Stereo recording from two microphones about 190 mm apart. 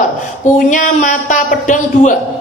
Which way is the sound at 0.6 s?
40° left (ahead or behind).